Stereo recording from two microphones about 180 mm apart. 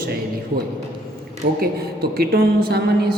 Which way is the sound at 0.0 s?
60° right (ahead or behind).